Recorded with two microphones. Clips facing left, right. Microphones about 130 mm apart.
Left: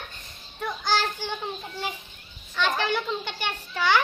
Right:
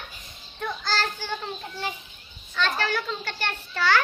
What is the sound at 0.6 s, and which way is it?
Speech, 15° left (ahead or behind).